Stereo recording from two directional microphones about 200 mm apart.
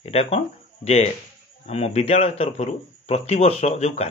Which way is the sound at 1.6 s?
30° left (ahead or behind).